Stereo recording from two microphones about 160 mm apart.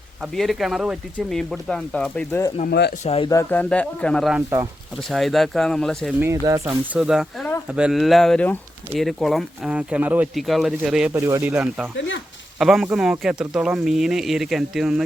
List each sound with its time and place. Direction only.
0.2 s speech: centre (ahead or behind)
2.6 s speech: 90° left
3.0 s speech: 40° left (ahead or behind)
3.2 s speech: 20° left (ahead or behind)
3.6 s speech: 5° left (ahead or behind)
4.4 s speech: 20° right (ahead or behind)
5.0 s speech: centre (ahead or behind)
6.1 s speech: 15° right (ahead or behind)
6.9 s speech: 5° right (ahead or behind)
11.1 s speech: 15° right (ahead or behind)